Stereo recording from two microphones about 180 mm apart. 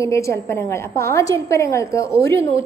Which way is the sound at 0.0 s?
15° left (ahead or behind).